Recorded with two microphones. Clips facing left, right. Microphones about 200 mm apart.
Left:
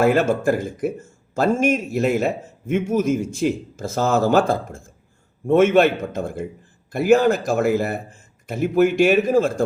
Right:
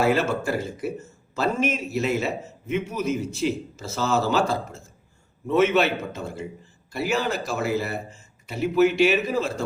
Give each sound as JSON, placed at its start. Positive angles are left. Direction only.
{"t": 0.0, "sound": "speech", "side_deg": 50}